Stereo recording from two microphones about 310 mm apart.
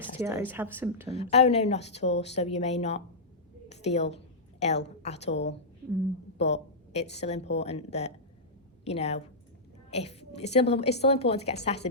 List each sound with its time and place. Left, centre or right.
0.2 s speech: centre
1.1 s a woman's voice: centre